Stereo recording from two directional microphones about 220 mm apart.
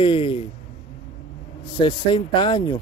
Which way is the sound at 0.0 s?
25° left (ahead or behind).